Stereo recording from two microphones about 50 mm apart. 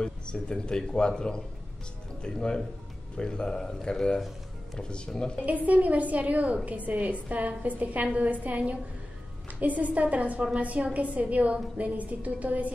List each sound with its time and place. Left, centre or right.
0.0 s speech: centre
5.7 s a woman's voice: right